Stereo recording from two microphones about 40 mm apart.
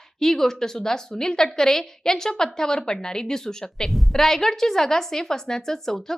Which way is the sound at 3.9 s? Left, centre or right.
Centre.